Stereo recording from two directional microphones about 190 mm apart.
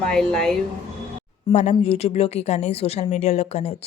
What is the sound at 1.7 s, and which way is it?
Speech, 30° left (ahead or behind).